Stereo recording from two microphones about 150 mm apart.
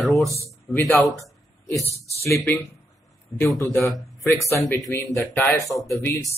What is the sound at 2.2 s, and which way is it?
Speech, 15° left (ahead or behind).